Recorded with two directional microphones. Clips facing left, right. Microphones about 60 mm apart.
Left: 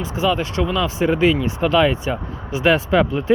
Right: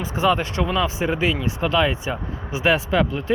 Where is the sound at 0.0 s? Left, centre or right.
Right.